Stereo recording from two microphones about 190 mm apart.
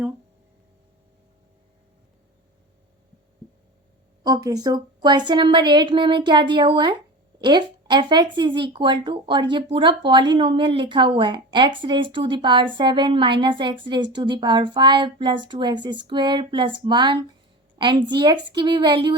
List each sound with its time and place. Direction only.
4.2 s a woman's voice: 20° right (ahead or behind)